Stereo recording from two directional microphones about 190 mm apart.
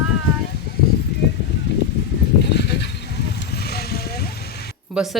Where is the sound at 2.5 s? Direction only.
65° left (ahead or behind).